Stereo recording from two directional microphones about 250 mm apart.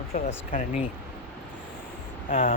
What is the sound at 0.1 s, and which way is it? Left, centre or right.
Speech, left.